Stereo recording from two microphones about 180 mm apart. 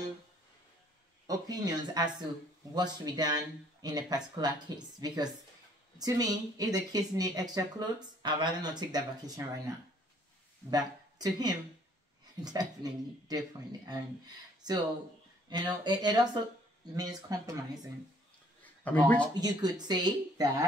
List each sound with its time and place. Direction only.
1.2 s speech: 20° right (ahead or behind)
10.7 s speech: 20° right (ahead or behind)
18.6 s a sound: 10° left (ahead or behind)
19.3 s speech: 20° right (ahead or behind)